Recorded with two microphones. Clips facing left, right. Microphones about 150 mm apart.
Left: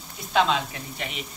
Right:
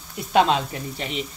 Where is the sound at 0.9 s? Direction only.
30° right (ahead or behind).